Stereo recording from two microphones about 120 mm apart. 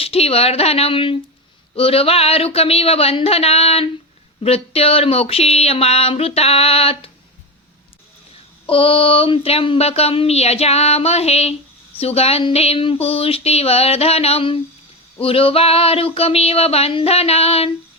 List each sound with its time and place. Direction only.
0.0 s speech: 55° left (ahead or behind)
8.6 s speech: 50° left (ahead or behind)